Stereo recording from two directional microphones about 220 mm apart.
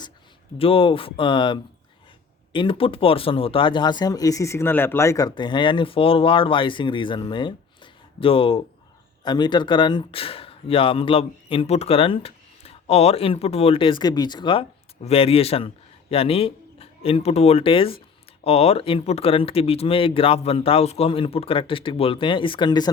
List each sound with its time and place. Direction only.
0.6 s speech: 25° left (ahead or behind)